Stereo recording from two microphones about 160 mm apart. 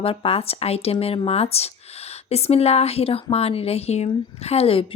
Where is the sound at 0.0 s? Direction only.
35° left (ahead or behind).